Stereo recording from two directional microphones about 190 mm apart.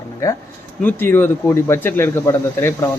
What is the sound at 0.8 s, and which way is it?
Speech, 10° left (ahead or behind).